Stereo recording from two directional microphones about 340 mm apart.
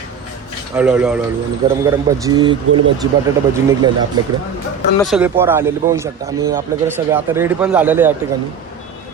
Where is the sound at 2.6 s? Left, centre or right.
Right.